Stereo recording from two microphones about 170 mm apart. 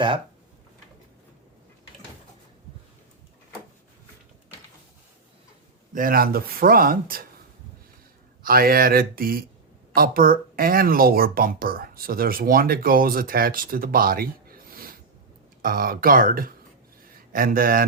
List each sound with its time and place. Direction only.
5.9 s speech: 55° right (ahead or behind)
8.4 s speech: 60° right (ahead or behind)